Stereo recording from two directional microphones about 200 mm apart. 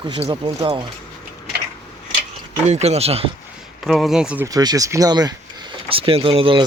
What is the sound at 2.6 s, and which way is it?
Speech, 35° right (ahead or behind).